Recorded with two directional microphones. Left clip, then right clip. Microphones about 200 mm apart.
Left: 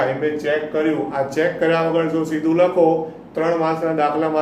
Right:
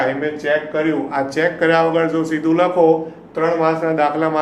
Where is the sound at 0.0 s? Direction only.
20° right (ahead or behind).